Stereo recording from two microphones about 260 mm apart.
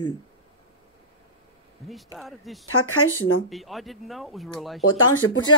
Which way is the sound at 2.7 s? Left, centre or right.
Left.